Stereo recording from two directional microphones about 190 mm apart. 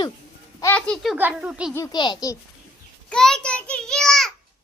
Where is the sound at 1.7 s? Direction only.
20° left (ahead or behind).